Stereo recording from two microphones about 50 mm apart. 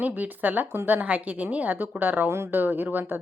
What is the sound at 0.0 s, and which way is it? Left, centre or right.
A woman's voice, right.